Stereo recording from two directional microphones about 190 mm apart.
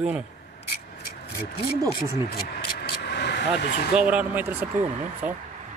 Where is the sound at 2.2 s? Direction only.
55° left (ahead or behind).